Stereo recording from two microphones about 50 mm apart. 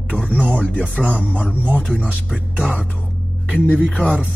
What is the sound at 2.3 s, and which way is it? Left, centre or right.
Speech, right.